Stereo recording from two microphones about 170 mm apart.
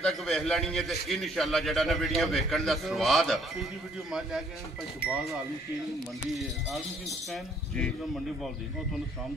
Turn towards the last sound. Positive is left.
turn(degrees=5)  # may be behind; listen again after turning